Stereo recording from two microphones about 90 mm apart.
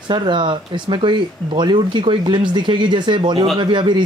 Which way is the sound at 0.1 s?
60° right (ahead or behind).